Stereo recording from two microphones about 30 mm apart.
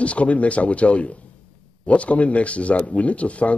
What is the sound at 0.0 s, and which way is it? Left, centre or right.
Speech, left.